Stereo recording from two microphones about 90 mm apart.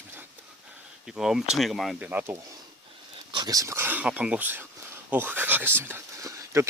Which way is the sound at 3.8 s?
20° right (ahead or behind).